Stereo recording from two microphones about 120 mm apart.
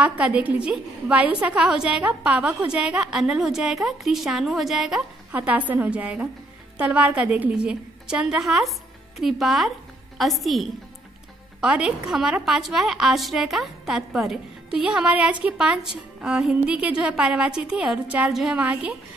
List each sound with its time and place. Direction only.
0.0 s a woman's voice: 10° right (ahead or behind)
5.3 s a woman's voice: 15° right (ahead or behind)